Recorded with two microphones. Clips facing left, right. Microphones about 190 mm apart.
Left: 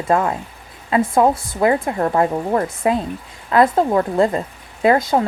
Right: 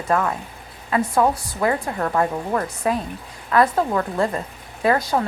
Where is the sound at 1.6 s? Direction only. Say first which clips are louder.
Left 5 dB; 20° left (ahead or behind).